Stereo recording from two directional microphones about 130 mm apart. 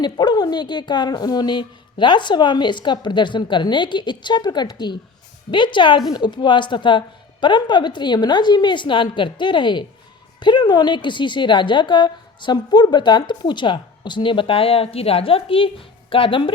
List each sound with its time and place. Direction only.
0.0 s a woman's voice: 35° left (ahead or behind)